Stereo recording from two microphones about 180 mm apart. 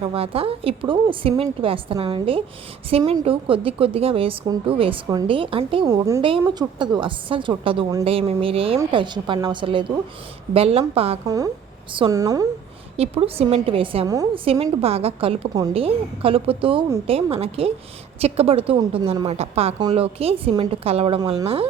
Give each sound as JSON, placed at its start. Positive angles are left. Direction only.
{"t": 0.0, "sound": "a woman's voice", "side_deg": -30}
{"t": 5.9, "sound": "a woman's voice", "side_deg": -15}
{"t": 11.3, "sound": "a woman's voice", "side_deg": -20}
{"t": 13.0, "sound": "a woman's voice", "side_deg": -30}
{"t": 14.1, "sound": "a woman's voice", "side_deg": -20}
{"t": 14.4, "sound": "a woman's voice", "side_deg": -30}